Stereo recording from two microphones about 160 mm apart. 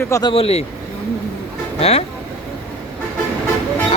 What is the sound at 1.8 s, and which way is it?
Speech, 40° left (ahead or behind).